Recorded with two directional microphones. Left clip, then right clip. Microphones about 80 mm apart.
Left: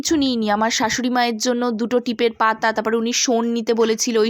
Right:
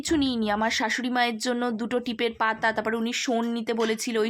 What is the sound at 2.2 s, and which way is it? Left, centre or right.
A woman's voice, left.